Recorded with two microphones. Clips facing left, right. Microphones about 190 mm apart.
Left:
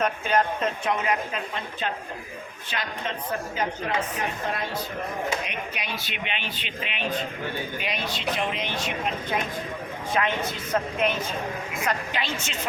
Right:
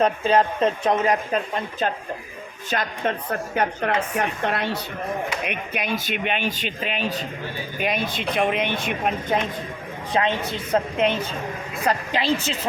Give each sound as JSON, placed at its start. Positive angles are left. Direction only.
{"t": 0.0, "sound": "a woman's voice", "side_deg": -30}
{"t": 3.5, "sound": "a woman's voice", "side_deg": -65}
{"t": 5.5, "sound": "speech", "side_deg": -50}
{"t": 7.8, "sound": "speech", "side_deg": -50}
{"t": 10.2, "sound": "a woman's voice", "side_deg": -25}